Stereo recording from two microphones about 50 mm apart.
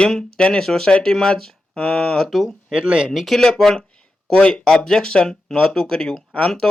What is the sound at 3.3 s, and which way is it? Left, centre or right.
Speech, centre.